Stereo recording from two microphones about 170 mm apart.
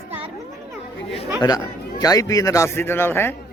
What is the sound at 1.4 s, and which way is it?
A man's voice, 20° left (ahead or behind).